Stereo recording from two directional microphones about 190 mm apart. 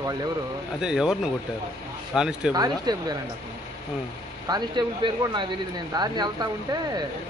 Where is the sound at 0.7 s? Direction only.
5° right (ahead or behind).